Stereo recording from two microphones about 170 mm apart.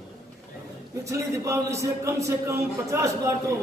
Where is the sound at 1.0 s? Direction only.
20° right (ahead or behind).